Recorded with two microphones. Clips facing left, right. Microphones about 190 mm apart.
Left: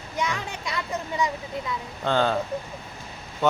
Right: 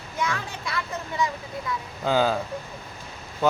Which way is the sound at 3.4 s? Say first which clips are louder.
Even; centre (ahead or behind).